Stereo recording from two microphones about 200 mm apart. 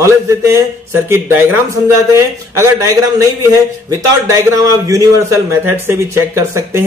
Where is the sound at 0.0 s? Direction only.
15° right (ahead or behind).